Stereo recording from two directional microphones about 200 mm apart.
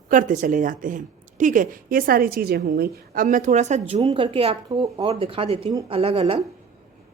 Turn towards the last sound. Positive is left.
turn(degrees=-30)  # may be behind; listen again after turning